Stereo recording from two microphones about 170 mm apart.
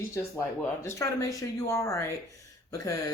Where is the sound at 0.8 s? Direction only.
20° left (ahead or behind).